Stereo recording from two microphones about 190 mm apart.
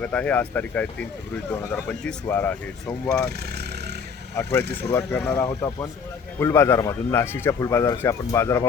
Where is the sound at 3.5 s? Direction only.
60° right (ahead or behind).